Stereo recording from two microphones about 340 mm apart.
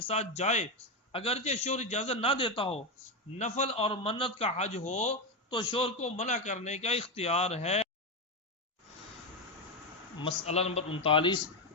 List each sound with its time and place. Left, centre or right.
0.0 s a man's voice: centre
10.2 s a man's voice: centre